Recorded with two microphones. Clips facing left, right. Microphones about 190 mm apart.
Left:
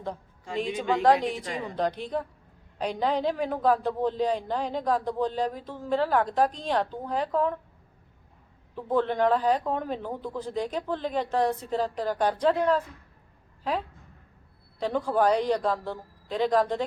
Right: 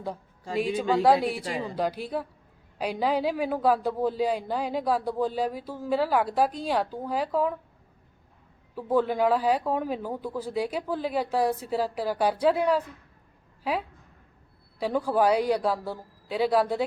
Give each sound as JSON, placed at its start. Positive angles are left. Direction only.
{"t": 0.7, "sound": "a woman's voice", "side_deg": -35}
{"t": 1.0, "sound": "a man's voice", "side_deg": -10}
{"t": 8.7, "sound": "a man's voice", "side_deg": -10}
{"t": 14.8, "sound": "a man's voice", "side_deg": -10}